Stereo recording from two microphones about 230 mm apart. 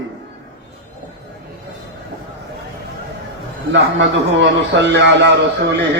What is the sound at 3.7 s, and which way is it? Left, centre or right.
A man's voice, right.